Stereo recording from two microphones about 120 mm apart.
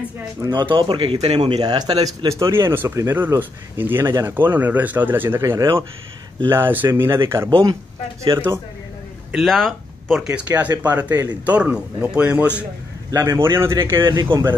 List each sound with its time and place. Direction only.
0.4 s speech: 40° right (ahead or behind); by 1.6 s 60° right (ahead or behind)
1.6 s speech: 35° right (ahead or behind)
9.3 s speech: centre (ahead or behind)
10.3 s a man's voice: 15° right (ahead or behind)
13.1 s speech: 20° right (ahead or behind)
14.1 s speech: 40° right (ahead or behind)